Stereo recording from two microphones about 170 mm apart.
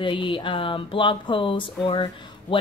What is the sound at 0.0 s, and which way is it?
Speech, 30° left (ahead or behind).